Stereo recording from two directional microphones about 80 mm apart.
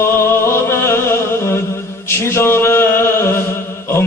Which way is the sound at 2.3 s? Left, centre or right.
Left.